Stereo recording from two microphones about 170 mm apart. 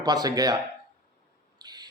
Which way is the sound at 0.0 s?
20° right (ahead or behind).